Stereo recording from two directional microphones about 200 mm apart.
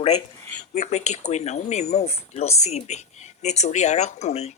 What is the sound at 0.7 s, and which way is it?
Speech, 35° left (ahead or behind).